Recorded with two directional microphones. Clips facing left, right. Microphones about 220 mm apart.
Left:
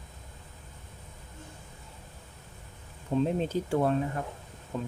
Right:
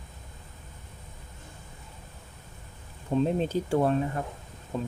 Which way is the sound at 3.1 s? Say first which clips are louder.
Right 2 dB; 25° right (ahead or behind).